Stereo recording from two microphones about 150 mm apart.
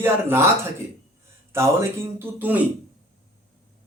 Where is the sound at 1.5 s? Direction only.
15° right (ahead or behind).